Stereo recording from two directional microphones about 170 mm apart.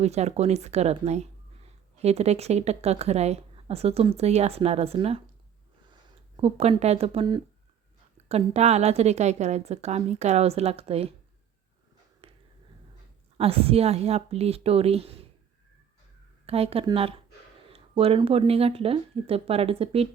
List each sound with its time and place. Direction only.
0.0 s speech: 40° right (ahead or behind)
12.2 s finger snapping: 30° right (ahead or behind)
13.3 s speech: 35° right (ahead or behind)
16.5 s speech: 35° right (ahead or behind)